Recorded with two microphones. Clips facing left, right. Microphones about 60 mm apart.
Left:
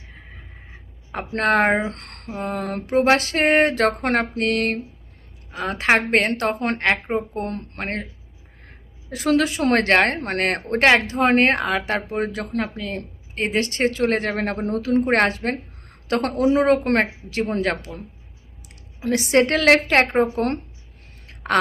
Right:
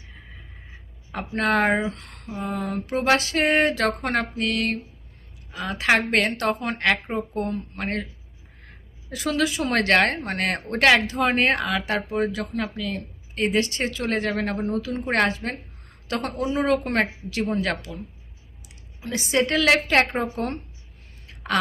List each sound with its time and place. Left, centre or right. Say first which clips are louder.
1.4 s speech: left 3 dB; left
1.9 s speech: even; left
2.4 s mantra: left 2 dB; left
2.9 s speech: left 4 dB; left
7.4 s mantra: even; left
7.8 s speech: left 1 dB; left
9.0 s a woman's voice: left 4 dB; left
16.3 s speech: left 8 dB; left
16.8 s speech: left 4 dB; left
18.9 s speech: left 6 dB; left